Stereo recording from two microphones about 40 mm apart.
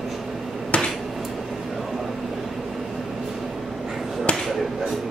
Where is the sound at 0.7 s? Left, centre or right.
Left.